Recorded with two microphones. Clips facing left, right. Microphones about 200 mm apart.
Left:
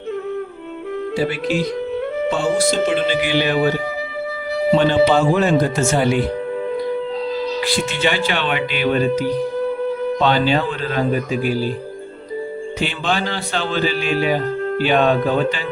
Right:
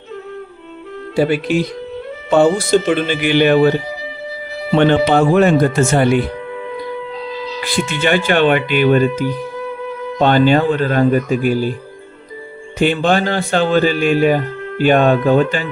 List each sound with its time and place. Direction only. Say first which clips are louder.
1.1 s speech: right 6 dB; 60° right (ahead or behind)
4.8 s speech: right 5 dB; 60° right (ahead or behind)
7.6 s speech: right 5 dB; 50° right (ahead or behind)
12.8 s speech: right 8 dB; 50° right (ahead or behind)